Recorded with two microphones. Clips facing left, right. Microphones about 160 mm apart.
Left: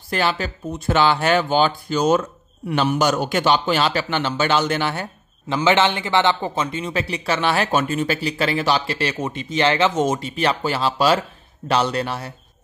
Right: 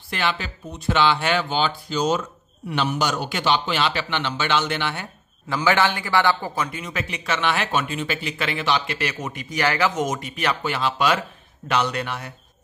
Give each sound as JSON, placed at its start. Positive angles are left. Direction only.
{"t": 0.1, "sound": "a man's voice", "side_deg": 40}
{"t": 5.5, "sound": "a man's voice", "side_deg": 20}